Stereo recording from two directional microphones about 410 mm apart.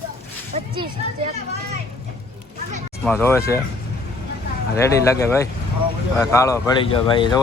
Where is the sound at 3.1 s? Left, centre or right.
Centre.